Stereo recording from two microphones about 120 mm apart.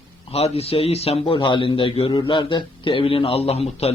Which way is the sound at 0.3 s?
55° left (ahead or behind).